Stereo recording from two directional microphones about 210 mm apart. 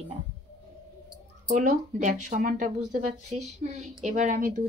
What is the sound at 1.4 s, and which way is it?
Speech, 40° right (ahead or behind).